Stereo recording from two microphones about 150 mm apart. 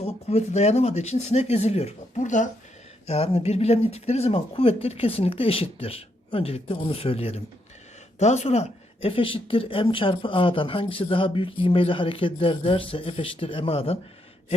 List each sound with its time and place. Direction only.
0.0 s speech: 45° left (ahead or behind)
3.1 s speech: 40° left (ahead or behind)